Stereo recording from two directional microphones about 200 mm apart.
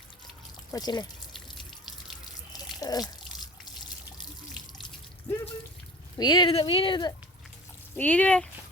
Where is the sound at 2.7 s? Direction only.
20° left (ahead or behind).